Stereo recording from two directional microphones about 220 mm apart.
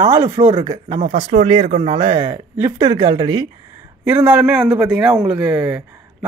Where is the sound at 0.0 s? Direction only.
10° right (ahead or behind).